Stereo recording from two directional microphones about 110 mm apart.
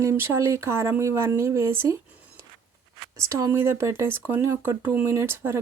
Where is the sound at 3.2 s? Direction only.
25° right (ahead or behind).